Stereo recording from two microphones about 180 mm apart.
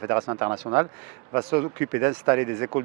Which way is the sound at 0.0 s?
20° right (ahead or behind).